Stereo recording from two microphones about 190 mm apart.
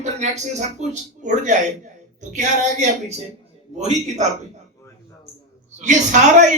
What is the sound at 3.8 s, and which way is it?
Speech, 35° right (ahead or behind).